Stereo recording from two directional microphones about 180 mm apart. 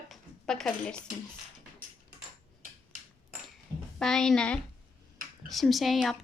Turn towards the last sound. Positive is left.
turn(degrees=0)  # may be behind; listen again after turning